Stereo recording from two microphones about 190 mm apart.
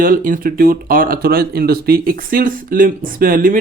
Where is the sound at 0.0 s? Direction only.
50° right (ahead or behind).